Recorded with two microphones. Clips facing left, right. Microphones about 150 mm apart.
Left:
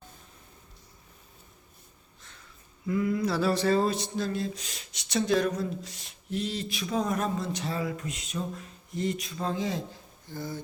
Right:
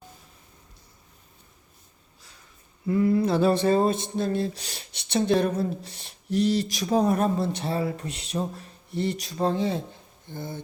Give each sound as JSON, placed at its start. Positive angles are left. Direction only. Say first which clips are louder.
{"t": 2.8, "sound": "speech", "louder": "right 5 dB", "side_deg": -35}